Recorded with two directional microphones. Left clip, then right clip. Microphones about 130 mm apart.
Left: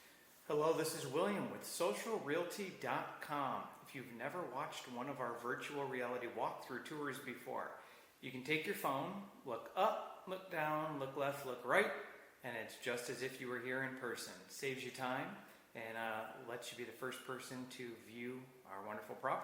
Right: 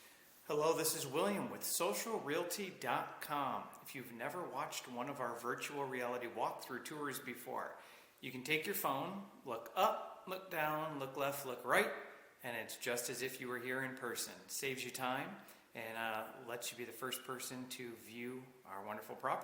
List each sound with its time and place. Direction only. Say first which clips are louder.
0.4 s speech: right 1 dB; 20° right (ahead or behind)